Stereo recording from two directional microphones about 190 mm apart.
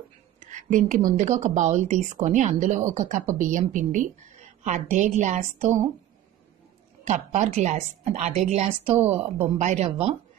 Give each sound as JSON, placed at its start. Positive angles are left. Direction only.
{"t": 0.4, "sound": "a woman's voice", "side_deg": -40}
{"t": 7.1, "sound": "a woman's voice", "side_deg": -35}